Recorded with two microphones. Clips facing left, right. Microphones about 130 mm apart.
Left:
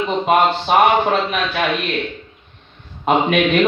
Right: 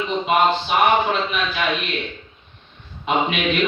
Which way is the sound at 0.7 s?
50° left (ahead or behind).